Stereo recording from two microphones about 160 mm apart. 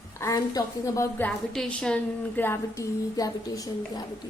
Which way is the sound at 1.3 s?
5° left (ahead or behind).